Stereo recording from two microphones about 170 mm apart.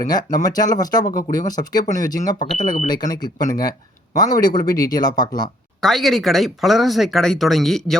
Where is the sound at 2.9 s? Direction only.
20° left (ahead or behind).